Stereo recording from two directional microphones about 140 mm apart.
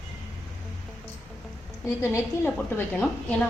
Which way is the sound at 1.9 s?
20° left (ahead or behind).